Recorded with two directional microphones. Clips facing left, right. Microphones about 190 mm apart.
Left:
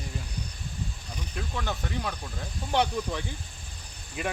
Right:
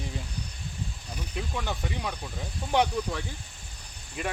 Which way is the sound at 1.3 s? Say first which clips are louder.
Even; 10° right (ahead or behind).